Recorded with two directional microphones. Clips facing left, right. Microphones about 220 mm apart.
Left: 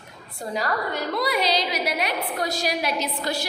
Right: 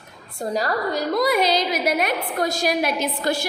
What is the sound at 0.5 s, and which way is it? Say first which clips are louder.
A woman's voice: right 3 dB; 40° right (ahead or behind).